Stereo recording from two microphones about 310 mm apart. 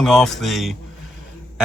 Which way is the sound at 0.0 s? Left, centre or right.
Centre.